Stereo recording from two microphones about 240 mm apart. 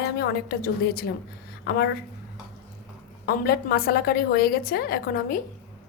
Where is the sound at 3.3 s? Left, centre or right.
Left.